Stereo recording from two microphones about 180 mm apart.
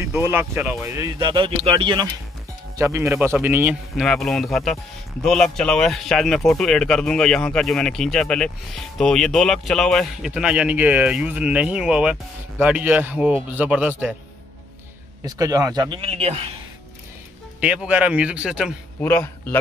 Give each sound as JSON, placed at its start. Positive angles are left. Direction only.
{"t": 0.0, "sound": "speech", "side_deg": -15}
{"t": 2.8, "sound": "speech", "side_deg": -15}
{"t": 4.0, "sound": "speech", "side_deg": 0}
{"t": 15.2, "sound": "a man's voice", "side_deg": -20}
{"t": 17.6, "sound": "speech", "side_deg": -5}
{"t": 18.9, "sound": "a man's voice", "side_deg": 10}